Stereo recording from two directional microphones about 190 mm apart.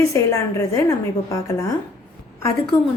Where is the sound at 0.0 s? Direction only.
15° left (ahead or behind).